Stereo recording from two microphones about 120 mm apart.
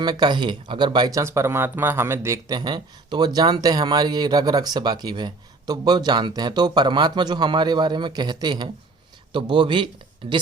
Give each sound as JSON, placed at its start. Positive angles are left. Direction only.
{"t": 0.0, "sound": "speech", "side_deg": -35}
{"t": 2.6, "sound": "speech", "side_deg": -35}